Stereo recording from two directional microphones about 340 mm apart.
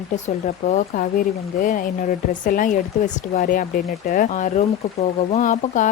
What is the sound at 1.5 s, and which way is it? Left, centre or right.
Speech, left.